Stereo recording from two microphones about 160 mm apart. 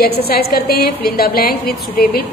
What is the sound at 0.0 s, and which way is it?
A woman's voice, 75° left (ahead or behind).